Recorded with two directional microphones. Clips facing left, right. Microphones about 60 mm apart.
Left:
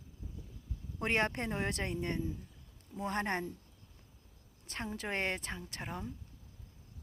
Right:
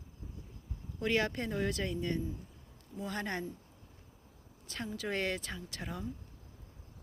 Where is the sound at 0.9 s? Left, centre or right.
Left.